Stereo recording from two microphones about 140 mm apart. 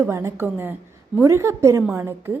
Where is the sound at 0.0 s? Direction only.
20° right (ahead or behind).